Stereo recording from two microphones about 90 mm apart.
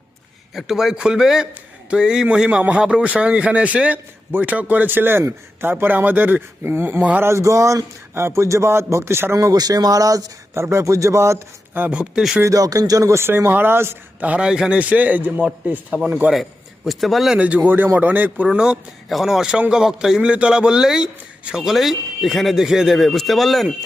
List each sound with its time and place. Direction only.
0.5 s a man's voice: 5° right (ahead or behind); by 7.0 s 25° right (ahead or behind)
7.0 s speech: 15° right (ahead or behind)
7.3 s speech: 35° right (ahead or behind)
11.7 s speech: 15° right (ahead or behind)
12.4 s speech: 40° right (ahead or behind); by 16.3 s 15° right (ahead or behind)
16.3 s a man's voice: centre (ahead or behind)
17.4 s speech: 15° right (ahead or behind)
18.4 s a man's voice: 10° right (ahead or behind)